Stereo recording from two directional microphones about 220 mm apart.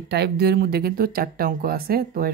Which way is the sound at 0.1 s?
45° right (ahead or behind).